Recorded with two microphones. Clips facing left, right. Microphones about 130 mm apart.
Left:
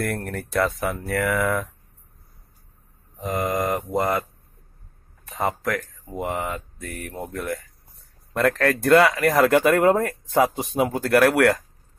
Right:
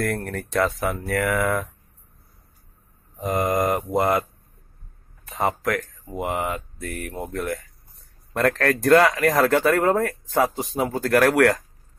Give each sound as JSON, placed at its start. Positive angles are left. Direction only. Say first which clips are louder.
{"t": 0.1, "sound": "speech", "louder": "right 1 dB", "side_deg": 0}
{"t": 3.3, "sound": "speech", "louder": "right 2 dB", "side_deg": -20}
{"t": 5.3, "sound": "speech", "louder": "right 1 dB", "side_deg": 0}
{"t": 6.0, "sound": "speech", "louder": "right 1 dB", "side_deg": -15}
{"t": 7.0, "sound": "speech", "louder": "right 2 dB", "side_deg": 0}
{"t": 9.4, "sound": "speech", "louder": "left 3 dB", "side_deg": 15}